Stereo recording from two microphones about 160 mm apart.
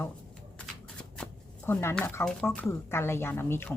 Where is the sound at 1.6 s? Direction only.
15° left (ahead or behind).